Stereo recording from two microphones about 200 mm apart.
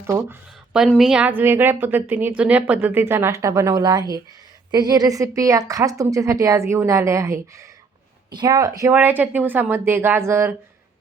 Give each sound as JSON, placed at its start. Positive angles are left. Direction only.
{"t": 0.1, "sound": "a woman's voice", "side_deg": -15}
{"t": 0.7, "sound": "a woman's voice", "side_deg": 0}